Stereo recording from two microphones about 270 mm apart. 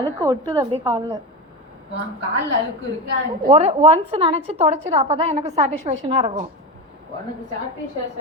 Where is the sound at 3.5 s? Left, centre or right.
Right.